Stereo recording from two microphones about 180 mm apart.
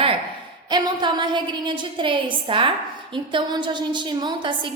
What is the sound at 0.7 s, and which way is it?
A woman's voice, 25° right (ahead or behind).